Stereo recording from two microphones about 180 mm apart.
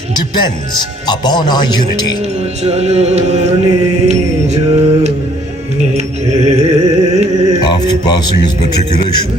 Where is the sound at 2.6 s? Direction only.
35° right (ahead or behind).